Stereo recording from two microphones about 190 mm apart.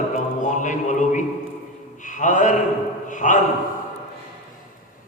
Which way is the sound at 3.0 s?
40° left (ahead or behind).